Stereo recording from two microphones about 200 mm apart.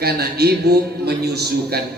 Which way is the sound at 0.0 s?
50° right (ahead or behind).